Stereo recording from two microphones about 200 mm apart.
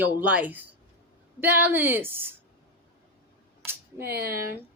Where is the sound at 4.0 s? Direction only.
50° right (ahead or behind).